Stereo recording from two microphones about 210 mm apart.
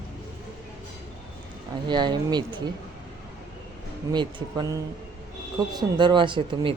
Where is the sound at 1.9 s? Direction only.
20° right (ahead or behind).